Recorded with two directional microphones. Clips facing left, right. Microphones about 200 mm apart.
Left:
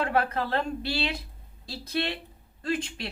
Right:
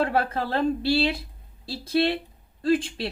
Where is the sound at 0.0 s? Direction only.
30° right (ahead or behind).